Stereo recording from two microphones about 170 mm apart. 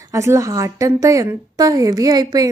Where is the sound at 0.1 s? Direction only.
15° right (ahead or behind).